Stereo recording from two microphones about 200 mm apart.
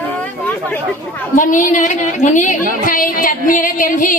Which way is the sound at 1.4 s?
40° left (ahead or behind).